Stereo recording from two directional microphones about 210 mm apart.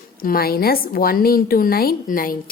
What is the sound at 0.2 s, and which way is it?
A woman's voice, 45° left (ahead or behind).